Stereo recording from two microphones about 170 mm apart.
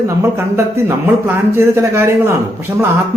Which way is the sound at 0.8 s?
15° right (ahead or behind).